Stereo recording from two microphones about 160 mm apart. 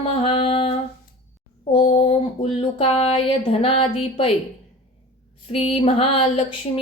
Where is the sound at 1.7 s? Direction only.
40° left (ahead or behind).